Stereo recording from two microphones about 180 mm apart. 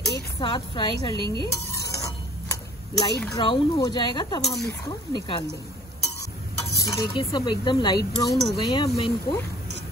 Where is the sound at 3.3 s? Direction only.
25° left (ahead or behind).